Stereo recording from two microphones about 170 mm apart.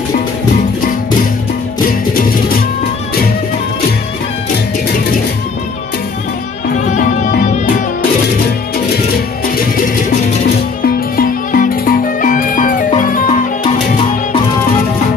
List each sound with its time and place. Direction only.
6.7 s music: 50° left (ahead or behind)
10.8 s music: 55° left (ahead or behind)